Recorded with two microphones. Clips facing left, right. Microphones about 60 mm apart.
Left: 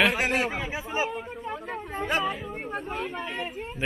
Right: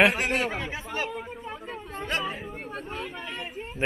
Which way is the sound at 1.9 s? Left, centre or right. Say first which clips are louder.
Left 3 dB; centre.